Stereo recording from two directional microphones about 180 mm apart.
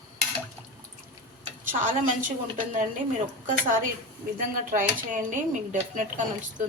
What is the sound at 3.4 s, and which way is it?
Speech, 45° right (ahead or behind).